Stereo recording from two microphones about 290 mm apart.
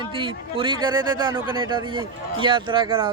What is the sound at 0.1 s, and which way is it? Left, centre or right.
A man's voice, centre.